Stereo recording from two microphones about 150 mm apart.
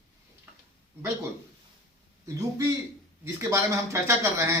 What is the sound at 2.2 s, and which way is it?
Speech, 20° right (ahead or behind).